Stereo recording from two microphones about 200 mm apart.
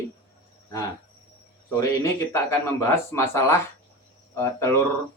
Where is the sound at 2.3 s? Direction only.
15° left (ahead or behind).